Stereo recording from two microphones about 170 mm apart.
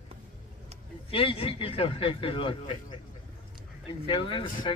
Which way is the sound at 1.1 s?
35° left (ahead or behind).